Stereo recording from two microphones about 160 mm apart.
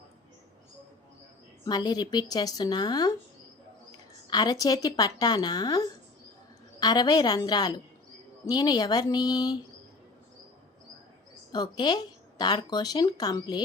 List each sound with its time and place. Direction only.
1.6 s speech: 25° left (ahead or behind)
4.3 s speech: 25° left (ahead or behind)
11.5 s speech: 25° left (ahead or behind)